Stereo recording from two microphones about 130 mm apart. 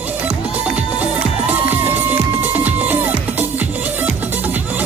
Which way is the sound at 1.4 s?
15° right (ahead or behind).